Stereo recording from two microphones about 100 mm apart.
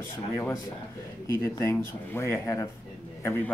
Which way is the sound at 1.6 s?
25° left (ahead or behind).